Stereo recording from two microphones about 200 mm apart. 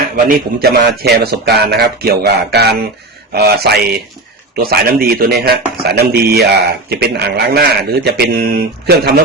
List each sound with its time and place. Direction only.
0.3 s speech: 50° right (ahead or behind)